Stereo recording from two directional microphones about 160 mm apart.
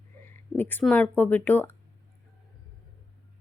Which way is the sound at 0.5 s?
10° left (ahead or behind).